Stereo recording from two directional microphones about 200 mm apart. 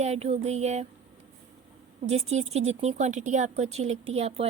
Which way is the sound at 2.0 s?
30° right (ahead or behind).